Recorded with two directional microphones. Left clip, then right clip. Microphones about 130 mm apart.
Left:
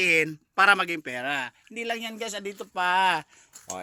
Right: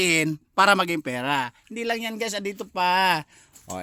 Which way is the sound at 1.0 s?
75° right (ahead or behind).